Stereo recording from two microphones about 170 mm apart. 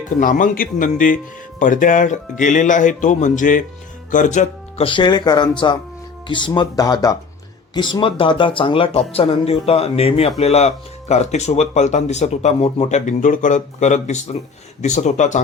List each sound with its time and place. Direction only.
0.2 s speech: 50° left (ahead or behind)